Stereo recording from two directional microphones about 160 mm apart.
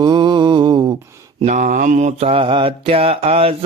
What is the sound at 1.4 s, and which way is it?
Mantra, 50° right (ahead or behind).